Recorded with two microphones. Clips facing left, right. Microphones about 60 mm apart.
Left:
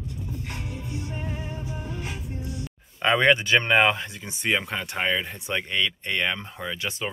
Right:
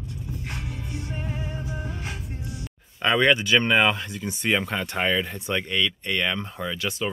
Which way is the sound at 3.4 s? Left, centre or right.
Left.